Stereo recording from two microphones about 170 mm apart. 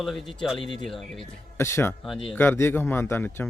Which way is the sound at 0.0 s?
Centre (ahead or behind).